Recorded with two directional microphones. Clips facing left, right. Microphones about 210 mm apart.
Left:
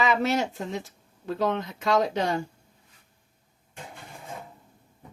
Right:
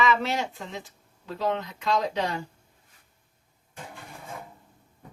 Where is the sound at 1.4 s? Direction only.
45° left (ahead or behind).